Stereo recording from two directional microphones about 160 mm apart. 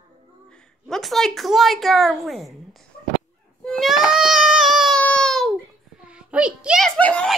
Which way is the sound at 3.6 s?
Centre (ahead or behind).